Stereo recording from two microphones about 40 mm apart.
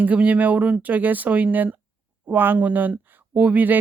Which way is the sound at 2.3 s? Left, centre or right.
Right.